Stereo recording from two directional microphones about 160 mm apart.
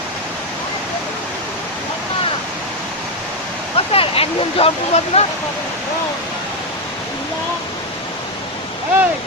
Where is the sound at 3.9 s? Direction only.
35° left (ahead or behind).